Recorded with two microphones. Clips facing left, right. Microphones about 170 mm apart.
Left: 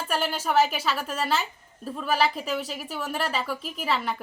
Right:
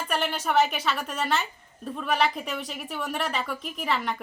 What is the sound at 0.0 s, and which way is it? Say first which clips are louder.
Speech: even; 5° left (ahead or behind).